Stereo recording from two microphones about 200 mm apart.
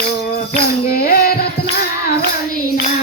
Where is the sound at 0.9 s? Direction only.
50° left (ahead or behind).